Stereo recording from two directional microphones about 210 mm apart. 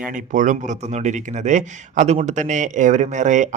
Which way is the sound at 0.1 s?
40° right (ahead or behind).